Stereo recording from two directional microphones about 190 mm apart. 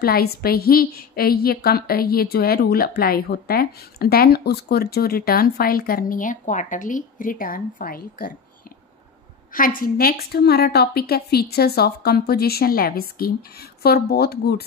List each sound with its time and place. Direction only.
0.0 s a woman's voice: 55° left (ahead or behind)
9.8 s a woman's voice: 50° left (ahead or behind)